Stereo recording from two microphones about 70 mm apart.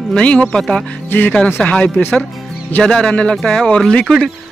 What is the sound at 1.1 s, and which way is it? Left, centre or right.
Speech, left.